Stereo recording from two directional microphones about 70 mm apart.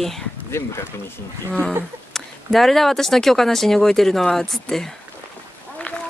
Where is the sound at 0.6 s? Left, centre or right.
Left.